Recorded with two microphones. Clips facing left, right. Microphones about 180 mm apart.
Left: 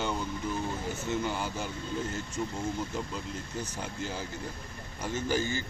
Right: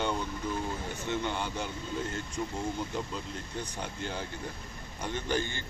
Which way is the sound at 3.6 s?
5° left (ahead or behind).